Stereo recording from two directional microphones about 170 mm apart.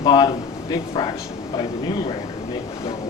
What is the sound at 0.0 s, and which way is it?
Speech, 25° left (ahead or behind).